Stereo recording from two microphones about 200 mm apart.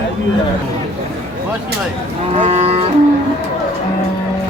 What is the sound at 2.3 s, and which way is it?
Cattle, 30° right (ahead or behind).